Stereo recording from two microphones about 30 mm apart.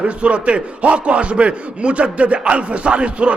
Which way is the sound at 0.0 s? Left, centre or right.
Right.